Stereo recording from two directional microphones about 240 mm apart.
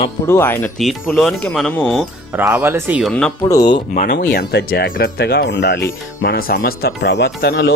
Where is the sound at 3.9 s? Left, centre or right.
Left.